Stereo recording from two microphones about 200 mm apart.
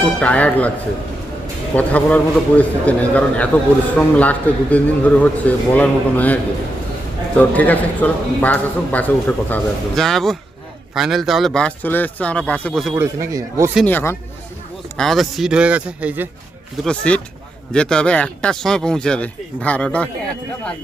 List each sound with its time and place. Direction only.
0.2 s a man's voice: 5° left (ahead or behind)
1.7 s a man's voice: 5° left (ahead or behind)
13.0 s a man's voice: 15° right (ahead or behind)
13.8 s a man's voice: 10° left (ahead or behind); by 16.3 s 10° right (ahead or behind)
16.8 s speech: 5° left (ahead or behind)